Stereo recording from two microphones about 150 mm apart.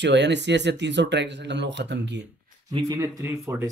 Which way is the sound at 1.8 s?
90° right.